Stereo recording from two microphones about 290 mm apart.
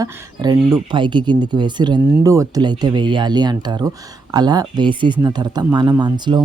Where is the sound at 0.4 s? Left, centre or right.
Centre.